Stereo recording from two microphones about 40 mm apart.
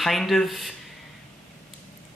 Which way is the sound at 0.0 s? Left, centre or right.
Centre.